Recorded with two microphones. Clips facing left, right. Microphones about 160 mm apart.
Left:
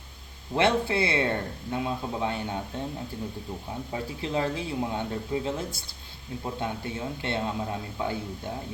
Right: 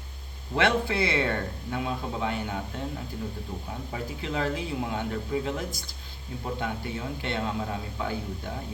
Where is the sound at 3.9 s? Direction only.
25° left (ahead or behind).